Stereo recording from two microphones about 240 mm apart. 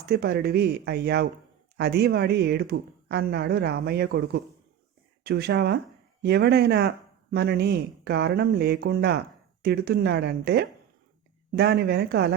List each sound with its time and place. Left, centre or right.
0.0 s speech: right